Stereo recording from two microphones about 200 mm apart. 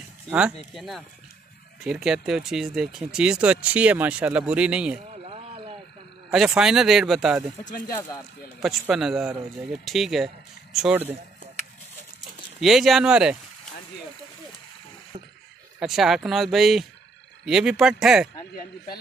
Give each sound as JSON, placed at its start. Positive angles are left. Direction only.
{"t": 0.7, "sound": "speech", "side_deg": 0}
{"t": 5.1, "sound": "a sound", "side_deg": -30}
{"t": 6.3, "sound": "speech", "side_deg": -5}
{"t": 7.6, "sound": "speech", "side_deg": 45}
{"t": 8.5, "sound": "speech", "side_deg": 0}
{"t": 12.5, "sound": "speech", "side_deg": 0}
{"t": 15.1, "sound": "a sound", "side_deg": -30}
{"t": 15.8, "sound": "speech", "side_deg": 0}